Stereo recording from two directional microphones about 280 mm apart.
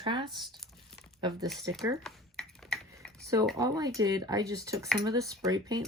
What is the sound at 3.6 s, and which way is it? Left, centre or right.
Speech, centre.